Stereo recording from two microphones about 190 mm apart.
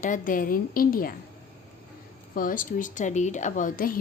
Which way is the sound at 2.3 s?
45° left (ahead or behind).